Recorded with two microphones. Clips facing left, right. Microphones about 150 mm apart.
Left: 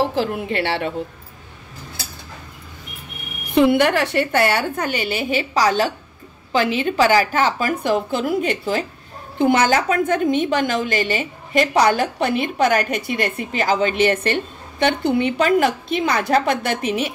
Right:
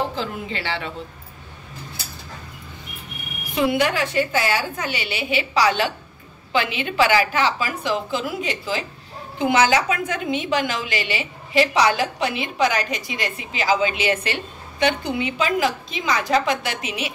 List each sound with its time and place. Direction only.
0.1 s a woman's voice: 65° left (ahead or behind)
3.5 s a woman's voice: 60° left (ahead or behind)